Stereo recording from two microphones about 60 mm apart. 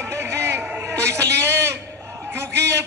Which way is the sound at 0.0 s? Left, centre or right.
Right.